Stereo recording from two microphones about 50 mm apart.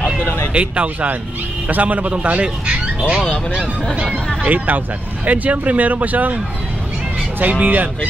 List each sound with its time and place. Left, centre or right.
0.5 s a man's voice: right
3.9 s speech: centre
4.5 s speech: right